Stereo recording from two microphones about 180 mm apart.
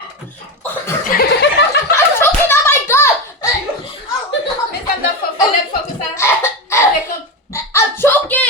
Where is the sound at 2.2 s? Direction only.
15° left (ahead or behind).